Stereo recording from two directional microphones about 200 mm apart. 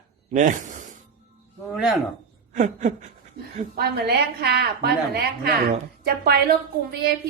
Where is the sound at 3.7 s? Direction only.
50° right (ahead or behind).